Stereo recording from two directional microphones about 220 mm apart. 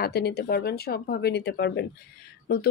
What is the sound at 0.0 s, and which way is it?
Speech, 45° left (ahead or behind).